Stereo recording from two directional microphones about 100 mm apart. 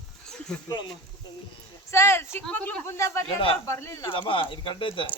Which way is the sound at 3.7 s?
25° left (ahead or behind).